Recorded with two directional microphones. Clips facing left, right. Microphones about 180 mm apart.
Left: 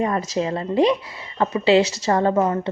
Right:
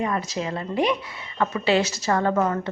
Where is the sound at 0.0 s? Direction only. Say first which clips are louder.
Left 4 dB; 35° left (ahead or behind).